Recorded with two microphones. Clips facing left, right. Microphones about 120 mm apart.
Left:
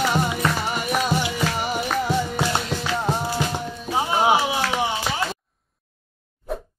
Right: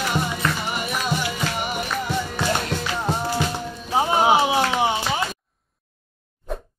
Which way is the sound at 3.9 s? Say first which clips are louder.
Right 3 dB; 25° right (ahead or behind).